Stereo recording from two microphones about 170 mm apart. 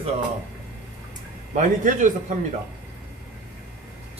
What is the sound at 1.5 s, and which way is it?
Speech, 45° right (ahead or behind).